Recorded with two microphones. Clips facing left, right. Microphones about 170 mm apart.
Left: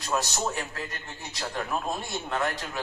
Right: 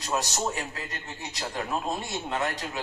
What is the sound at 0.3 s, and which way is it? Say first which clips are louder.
A woman's voice: even; 15° right (ahead or behind).